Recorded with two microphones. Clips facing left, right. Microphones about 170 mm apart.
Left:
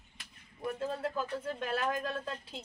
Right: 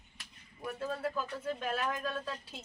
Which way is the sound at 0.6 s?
20° left (ahead or behind).